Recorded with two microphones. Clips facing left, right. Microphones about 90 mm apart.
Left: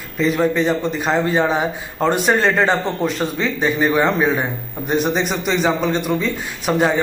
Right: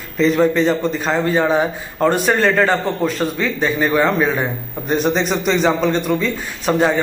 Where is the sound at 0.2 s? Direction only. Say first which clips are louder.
Right 3 dB; 10° left (ahead or behind).